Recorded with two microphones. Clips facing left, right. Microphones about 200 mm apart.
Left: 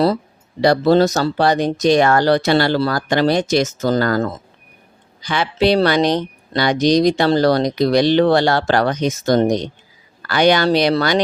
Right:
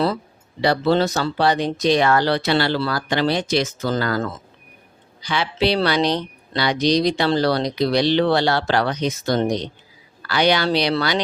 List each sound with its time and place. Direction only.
0.6 s speech: 40° left (ahead or behind)